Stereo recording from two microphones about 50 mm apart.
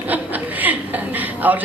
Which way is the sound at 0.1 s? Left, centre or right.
Right.